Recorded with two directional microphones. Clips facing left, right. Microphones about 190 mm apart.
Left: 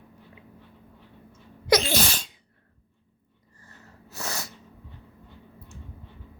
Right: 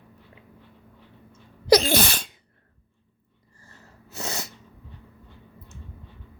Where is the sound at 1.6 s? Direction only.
35° right (ahead or behind).